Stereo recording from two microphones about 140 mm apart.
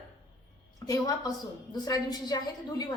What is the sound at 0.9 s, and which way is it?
A woman's voice, 25° left (ahead or behind).